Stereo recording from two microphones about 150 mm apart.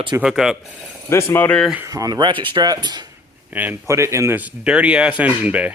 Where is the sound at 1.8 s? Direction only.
25° right (ahead or behind).